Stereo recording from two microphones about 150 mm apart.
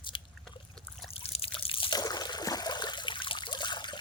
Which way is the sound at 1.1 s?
40° left (ahead or behind).